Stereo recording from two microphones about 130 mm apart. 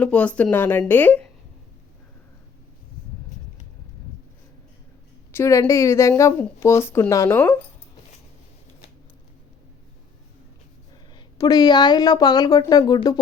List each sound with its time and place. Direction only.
0.0 s speech: 10° left (ahead or behind)
5.3 s a woman's voice: 20° left (ahead or behind)
10.9 s a woman's voice: 30° left (ahead or behind)